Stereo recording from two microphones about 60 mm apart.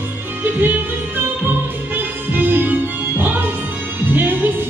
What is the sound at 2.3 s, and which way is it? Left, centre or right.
Music, right.